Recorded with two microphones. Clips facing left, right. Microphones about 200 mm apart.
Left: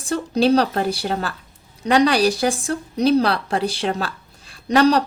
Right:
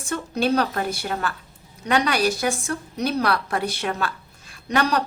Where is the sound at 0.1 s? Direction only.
35° left (ahead or behind).